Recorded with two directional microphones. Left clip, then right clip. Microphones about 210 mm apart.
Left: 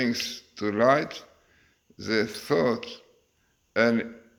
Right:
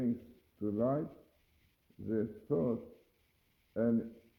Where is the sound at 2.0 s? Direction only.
25° left (ahead or behind).